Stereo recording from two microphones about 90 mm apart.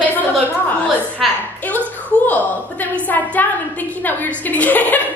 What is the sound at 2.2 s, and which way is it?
A woman's voice, 20° left (ahead or behind).